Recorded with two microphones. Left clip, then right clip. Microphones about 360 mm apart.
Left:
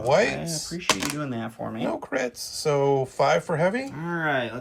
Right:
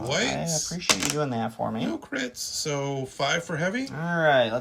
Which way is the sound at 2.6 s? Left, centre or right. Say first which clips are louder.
Left 9 dB; centre.